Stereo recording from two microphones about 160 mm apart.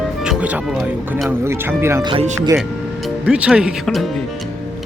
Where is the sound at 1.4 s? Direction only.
15° right (ahead or behind).